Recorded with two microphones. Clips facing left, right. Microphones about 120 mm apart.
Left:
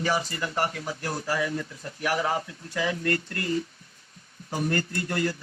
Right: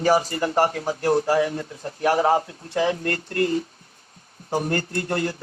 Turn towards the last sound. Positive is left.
turn(degrees=-30)  # may be behind; listen again after turning